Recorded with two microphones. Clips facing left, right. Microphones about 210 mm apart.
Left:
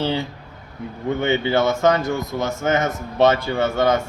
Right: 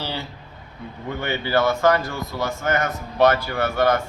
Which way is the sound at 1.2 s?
20° left (ahead or behind).